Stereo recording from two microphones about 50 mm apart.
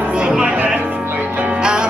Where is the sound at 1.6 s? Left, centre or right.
Centre.